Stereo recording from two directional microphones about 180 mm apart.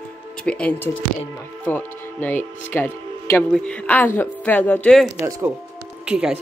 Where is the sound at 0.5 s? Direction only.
5° left (ahead or behind).